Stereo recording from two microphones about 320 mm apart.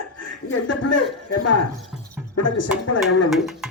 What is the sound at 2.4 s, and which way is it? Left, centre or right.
Speech, left.